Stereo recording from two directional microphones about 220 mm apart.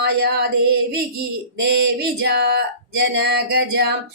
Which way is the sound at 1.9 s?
45° right (ahead or behind).